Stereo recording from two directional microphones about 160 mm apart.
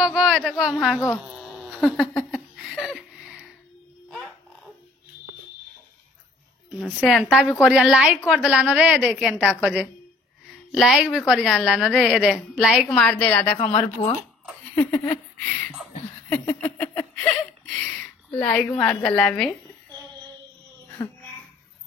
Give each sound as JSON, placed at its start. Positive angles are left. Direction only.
{"t": 0.0, "sound": "a woman's voice", "side_deg": 0}
{"t": 1.3, "sound": "a sound", "side_deg": 0}
{"t": 6.7, "sound": "a woman's voice", "side_deg": 0}
{"t": 12.8, "sound": "a woman's voice", "side_deg": 10}
{"t": 14.0, "sound": "speech", "side_deg": 40}
{"t": 14.8, "sound": "laughter", "side_deg": 10}
{"t": 16.3, "sound": "a sound", "side_deg": 15}
{"t": 18.9, "sound": "a woman's voice", "side_deg": 10}